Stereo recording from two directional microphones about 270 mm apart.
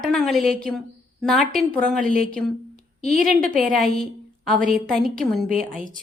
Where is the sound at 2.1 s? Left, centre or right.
Right.